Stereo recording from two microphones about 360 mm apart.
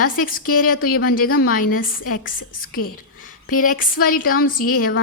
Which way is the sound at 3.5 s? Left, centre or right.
Left.